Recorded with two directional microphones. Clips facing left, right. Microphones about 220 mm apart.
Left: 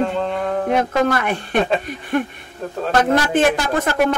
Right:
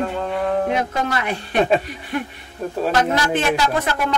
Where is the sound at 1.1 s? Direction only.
50° left (ahead or behind).